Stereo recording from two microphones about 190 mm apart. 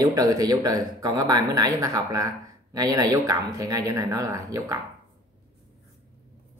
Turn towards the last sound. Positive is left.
turn(degrees=-15)  # may be behind; listen again after turning